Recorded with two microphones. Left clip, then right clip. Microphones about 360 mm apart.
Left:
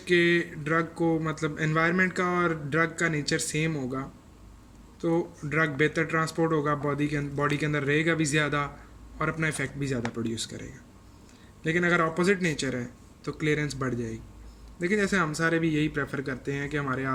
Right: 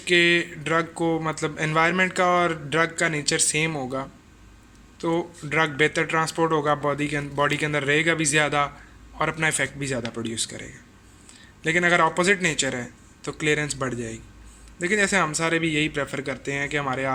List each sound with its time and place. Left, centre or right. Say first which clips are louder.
0.0 s speech: right 4 dB; centre
4.9 s speech: right 2 dB; centre